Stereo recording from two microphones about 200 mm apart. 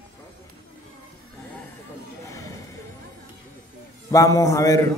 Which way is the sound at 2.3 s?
15° left (ahead or behind).